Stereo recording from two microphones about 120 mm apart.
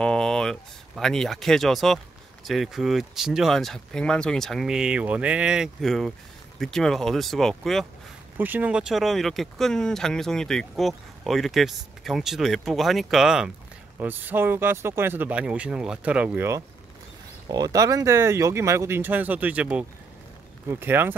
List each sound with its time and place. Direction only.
0.0 s speech: 5° left (ahead or behind)
8.4 s speech: 15° right (ahead or behind)
13.9 s speech: 15° right (ahead or behind)
17.5 s speech: 30° right (ahead or behind)